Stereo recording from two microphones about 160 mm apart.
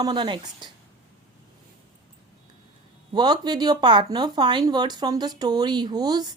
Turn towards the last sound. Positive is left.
turn(degrees=-25)  # may be behind; listen again after turning